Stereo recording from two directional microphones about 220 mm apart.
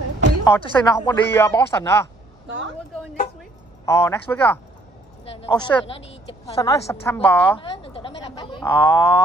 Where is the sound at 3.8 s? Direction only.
10° left (ahead or behind).